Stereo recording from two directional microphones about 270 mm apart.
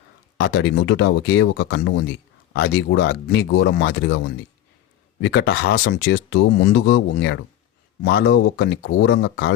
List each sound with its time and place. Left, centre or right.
0.3 s speech: left